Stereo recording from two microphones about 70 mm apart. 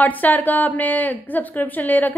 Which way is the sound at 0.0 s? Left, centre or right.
Left.